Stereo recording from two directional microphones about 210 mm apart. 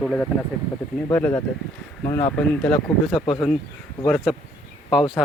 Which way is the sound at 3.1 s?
25° left (ahead or behind).